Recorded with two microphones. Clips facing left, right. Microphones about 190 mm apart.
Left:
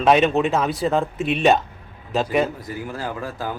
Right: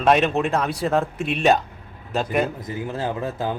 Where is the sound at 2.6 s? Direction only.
25° right (ahead or behind).